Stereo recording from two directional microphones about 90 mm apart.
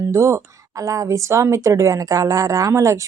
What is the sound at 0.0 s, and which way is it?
Speech, 35° right (ahead or behind).